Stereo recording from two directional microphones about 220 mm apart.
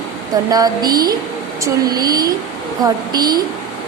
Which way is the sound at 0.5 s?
15° right (ahead or behind).